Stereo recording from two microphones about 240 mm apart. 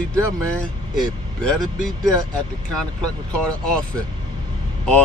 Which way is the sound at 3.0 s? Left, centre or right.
Centre.